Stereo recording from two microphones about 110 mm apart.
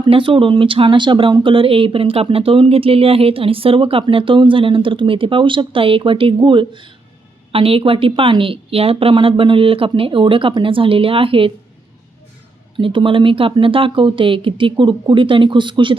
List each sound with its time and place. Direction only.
0.0 s speech: 50° right (ahead or behind)
12.7 s speech: 50° right (ahead or behind)